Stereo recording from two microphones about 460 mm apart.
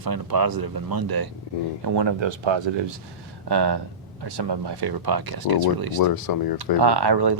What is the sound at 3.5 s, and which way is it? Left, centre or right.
Speech, right.